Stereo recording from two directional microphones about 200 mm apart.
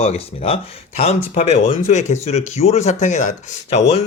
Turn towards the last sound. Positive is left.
turn(degrees=30)  # may be behind; listen again after turning